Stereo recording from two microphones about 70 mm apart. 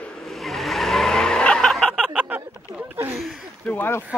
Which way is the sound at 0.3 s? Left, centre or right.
Centre.